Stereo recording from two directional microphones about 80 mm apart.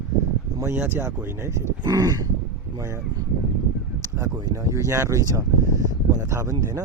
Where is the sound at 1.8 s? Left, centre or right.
Right.